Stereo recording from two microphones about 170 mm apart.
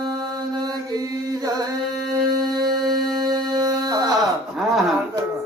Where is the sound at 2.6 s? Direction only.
25° right (ahead or behind).